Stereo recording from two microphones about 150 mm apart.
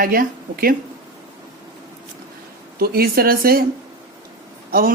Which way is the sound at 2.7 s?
85° right.